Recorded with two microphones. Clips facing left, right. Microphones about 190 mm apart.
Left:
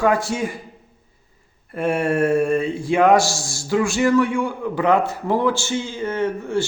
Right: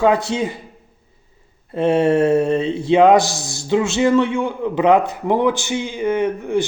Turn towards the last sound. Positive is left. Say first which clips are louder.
# right 3 dB
turn(degrees=-15)  # may be behind; listen again after turning